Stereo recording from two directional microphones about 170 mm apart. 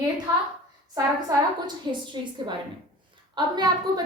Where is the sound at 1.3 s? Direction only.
20° right (ahead or behind).